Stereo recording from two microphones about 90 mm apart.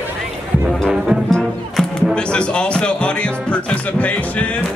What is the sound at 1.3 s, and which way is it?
Music, 10° left (ahead or behind).